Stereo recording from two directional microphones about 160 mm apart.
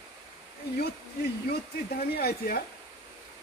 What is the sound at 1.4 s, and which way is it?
Speech, 80° left.